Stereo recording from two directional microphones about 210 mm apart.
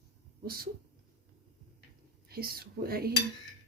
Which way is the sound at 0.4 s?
45° right (ahead or behind).